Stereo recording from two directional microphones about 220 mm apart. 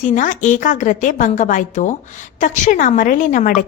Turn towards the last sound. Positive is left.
turn(degrees=35)  # may be behind; listen again after turning